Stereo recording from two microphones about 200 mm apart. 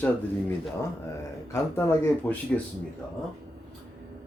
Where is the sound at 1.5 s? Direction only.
10° left (ahead or behind).